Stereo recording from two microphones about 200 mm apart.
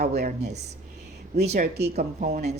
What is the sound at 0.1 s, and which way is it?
Speech, 55° right (ahead or behind).